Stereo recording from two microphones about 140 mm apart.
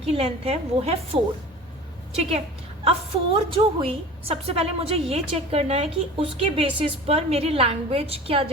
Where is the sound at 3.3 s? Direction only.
40° right (ahead or behind).